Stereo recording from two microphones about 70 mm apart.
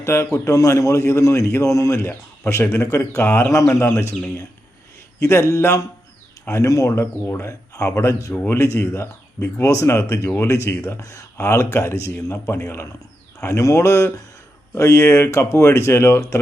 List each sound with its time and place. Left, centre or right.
0.0 s a man's voice: left
0.3 s a man's voice: left
2.0 s speech: left
3.5 s a man's voice: left
5.2 s a man's voice: left
6.9 s a man's voice: left
11.0 s speech: left
11.3 s a man's voice: left